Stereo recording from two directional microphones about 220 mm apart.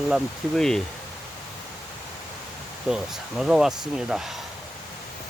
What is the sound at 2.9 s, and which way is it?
Speech, centre (ahead or behind).